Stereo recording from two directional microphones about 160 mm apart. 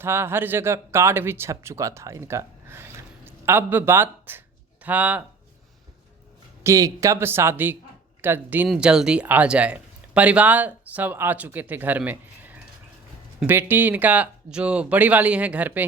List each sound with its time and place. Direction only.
0.0 s speech: 15° right (ahead or behind)
6.6 s speech: 20° right (ahead or behind)